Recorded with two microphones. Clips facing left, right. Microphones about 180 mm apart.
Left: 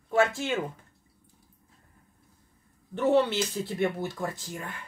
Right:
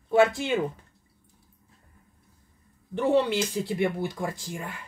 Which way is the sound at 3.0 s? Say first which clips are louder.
Even; 15° right (ahead or behind).